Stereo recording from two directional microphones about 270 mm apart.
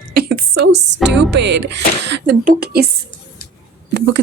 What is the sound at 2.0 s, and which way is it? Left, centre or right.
Speech, right.